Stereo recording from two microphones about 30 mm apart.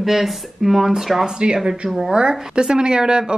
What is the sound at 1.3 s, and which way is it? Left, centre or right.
Speech, right.